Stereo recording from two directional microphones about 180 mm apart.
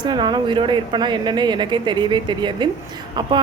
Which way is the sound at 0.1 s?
25° right (ahead or behind).